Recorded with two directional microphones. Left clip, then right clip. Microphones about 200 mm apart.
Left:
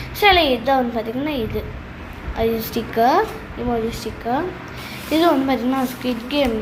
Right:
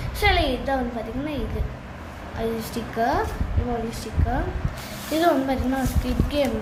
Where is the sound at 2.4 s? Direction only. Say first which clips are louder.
Left 7 dB; 20° left (ahead or behind).